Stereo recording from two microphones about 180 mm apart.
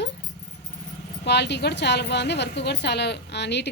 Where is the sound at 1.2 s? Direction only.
70° left (ahead or behind).